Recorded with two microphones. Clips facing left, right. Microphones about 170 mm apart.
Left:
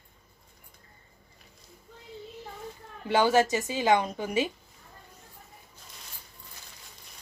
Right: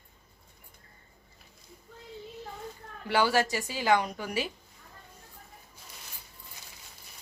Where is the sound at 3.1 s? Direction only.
20° left (ahead or behind).